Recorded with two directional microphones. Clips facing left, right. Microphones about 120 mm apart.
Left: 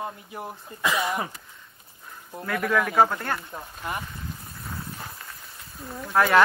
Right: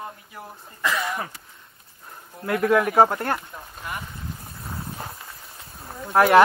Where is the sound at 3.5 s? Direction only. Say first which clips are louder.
Left 2 dB; 25° left (ahead or behind).